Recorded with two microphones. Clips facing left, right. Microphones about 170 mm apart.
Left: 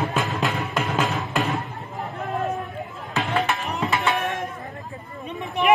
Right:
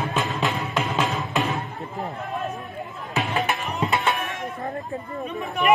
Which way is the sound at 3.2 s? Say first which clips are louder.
Left 1 dB; 20° right (ahead or behind).